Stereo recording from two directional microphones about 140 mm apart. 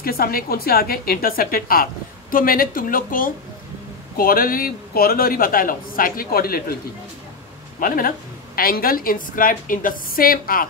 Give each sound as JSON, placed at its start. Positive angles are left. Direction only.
{"t": 0.0, "sound": "a man's voice", "side_deg": 90}
{"t": 7.8, "sound": "a man's voice", "side_deg": 90}